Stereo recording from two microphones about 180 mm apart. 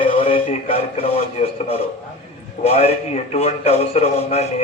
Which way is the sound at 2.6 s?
35° left (ahead or behind).